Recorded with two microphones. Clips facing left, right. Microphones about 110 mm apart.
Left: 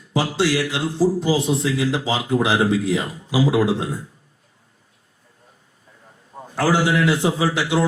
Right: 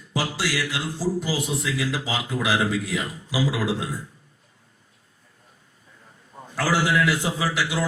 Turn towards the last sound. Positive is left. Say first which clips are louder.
# left 5 dB
turn(degrees=25)  # may be behind; listen again after turning